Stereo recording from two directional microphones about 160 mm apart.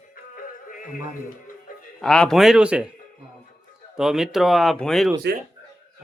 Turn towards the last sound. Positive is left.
turn(degrees=5)  # may be behind; listen again after turning